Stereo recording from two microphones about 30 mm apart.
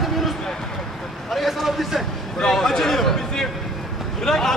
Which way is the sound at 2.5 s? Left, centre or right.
Centre.